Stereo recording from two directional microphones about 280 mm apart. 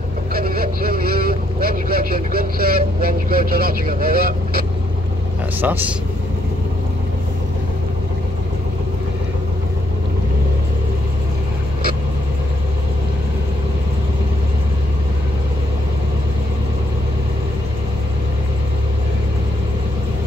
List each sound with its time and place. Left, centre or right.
0.3 s vehicle: right
5.6 s speech: centre